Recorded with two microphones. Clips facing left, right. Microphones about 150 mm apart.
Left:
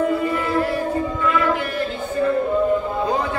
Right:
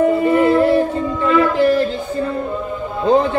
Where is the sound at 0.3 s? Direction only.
25° right (ahead or behind).